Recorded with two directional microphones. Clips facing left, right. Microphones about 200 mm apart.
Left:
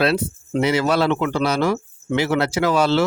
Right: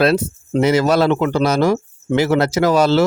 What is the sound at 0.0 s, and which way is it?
Speech, 45° right (ahead or behind).